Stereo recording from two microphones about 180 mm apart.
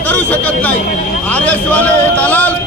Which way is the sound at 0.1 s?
10° left (ahead or behind).